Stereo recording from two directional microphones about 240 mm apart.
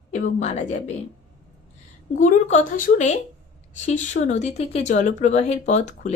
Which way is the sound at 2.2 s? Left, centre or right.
Left.